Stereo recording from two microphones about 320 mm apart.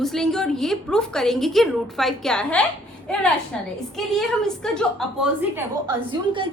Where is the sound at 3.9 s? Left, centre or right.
Centre.